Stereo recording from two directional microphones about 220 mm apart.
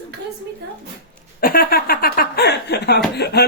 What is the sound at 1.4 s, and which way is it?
Speech, 40° left (ahead or behind).